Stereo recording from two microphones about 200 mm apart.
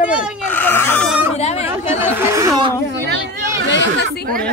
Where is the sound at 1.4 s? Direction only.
30° left (ahead or behind).